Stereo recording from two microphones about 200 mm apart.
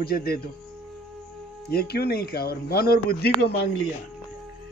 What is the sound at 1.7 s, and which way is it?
A man's voice, 50° left (ahead or behind).